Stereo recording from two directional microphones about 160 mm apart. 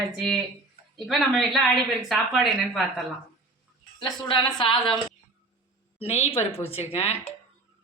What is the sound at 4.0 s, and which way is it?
A woman's voice, 30° left (ahead or behind).